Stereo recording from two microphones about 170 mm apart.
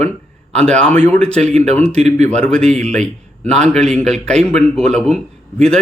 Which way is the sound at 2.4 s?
5° left (ahead or behind).